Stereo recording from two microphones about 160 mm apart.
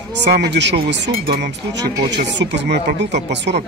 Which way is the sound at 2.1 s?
90° right.